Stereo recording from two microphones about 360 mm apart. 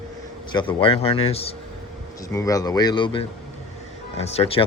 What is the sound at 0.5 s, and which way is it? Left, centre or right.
Speech, centre.